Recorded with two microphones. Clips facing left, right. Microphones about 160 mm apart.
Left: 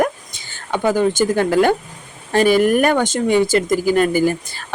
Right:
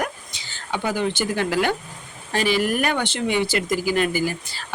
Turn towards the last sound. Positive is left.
turn(degrees=50)  # may be behind; listen again after turning